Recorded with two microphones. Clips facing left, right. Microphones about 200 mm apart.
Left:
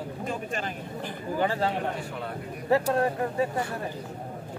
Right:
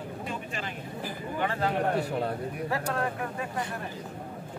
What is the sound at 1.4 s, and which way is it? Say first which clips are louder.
Speech: left 3 dB; 30° left (ahead or behind).